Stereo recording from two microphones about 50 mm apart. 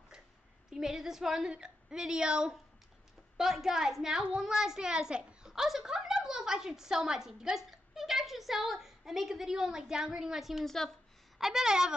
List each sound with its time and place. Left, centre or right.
0.7 s a child's voice: centre
10.6 s a woman's voice: centre
11.3 s a child's voice: centre